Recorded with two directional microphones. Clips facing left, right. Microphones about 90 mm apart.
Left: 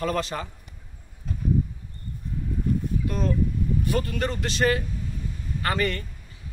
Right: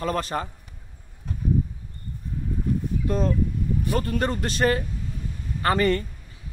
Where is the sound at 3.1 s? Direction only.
30° right (ahead or behind).